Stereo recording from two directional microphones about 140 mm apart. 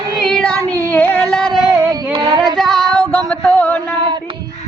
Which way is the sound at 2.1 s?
35° right (ahead or behind).